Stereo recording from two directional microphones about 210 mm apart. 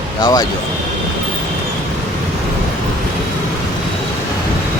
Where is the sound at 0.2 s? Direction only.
20° left (ahead or behind).